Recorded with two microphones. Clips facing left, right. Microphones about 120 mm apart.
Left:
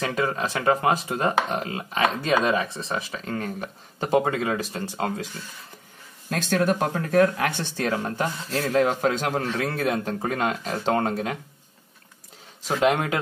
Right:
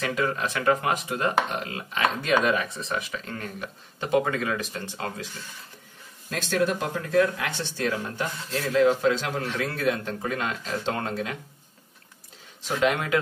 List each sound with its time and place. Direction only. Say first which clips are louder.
0.0 s speech: left 1 dB; 30° left (ahead or behind)
6.3 s speech: left 2 dB; 55° left (ahead or behind)
12.6 s speech: left 3 dB; 35° left (ahead or behind)